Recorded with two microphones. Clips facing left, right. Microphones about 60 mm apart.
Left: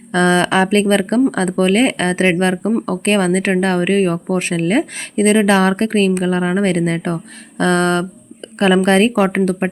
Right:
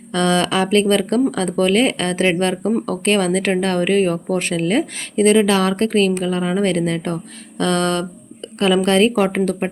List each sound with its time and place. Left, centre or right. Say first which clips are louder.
0.1 s a woman's voice: left 4 dB; left